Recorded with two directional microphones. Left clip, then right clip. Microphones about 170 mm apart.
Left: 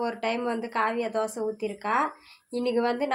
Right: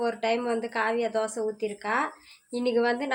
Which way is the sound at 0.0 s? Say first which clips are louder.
Right 2 dB; 15° left (ahead or behind).